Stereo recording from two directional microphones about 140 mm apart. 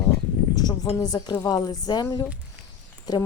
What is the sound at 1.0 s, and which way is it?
A woman's voice, 30° left (ahead or behind).